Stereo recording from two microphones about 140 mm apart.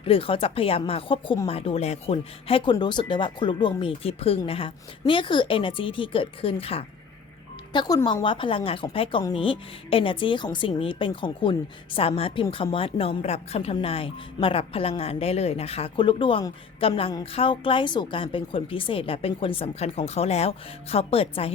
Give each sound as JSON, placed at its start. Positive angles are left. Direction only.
{"t": 0.0, "sound": "a woman's voice", "side_deg": 40}
{"t": 7.7, "sound": "a woman's voice", "side_deg": 30}